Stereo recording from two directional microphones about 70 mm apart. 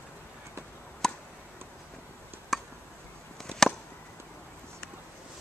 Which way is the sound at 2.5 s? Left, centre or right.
Centre.